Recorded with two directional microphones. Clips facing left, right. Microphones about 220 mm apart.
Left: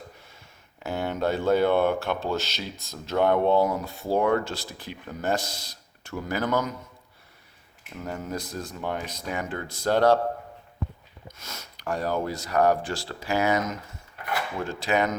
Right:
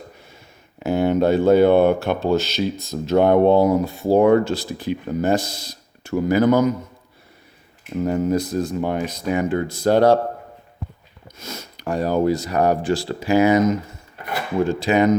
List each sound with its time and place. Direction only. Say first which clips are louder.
0.8 s speech: right 10 dB; 15° right (ahead or behind)
7.9 s speech: right 13 dB; 20° right (ahead or behind)
11.3 s speech: right 11 dB; 20° right (ahead or behind)